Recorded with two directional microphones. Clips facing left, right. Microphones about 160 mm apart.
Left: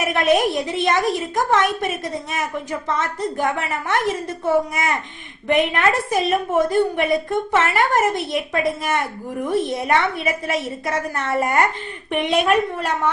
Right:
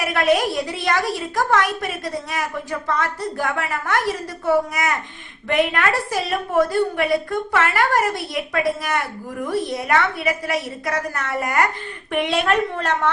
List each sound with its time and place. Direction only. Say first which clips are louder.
0.0 s a woman's voice: left 1 dB; 20° left (ahead or behind)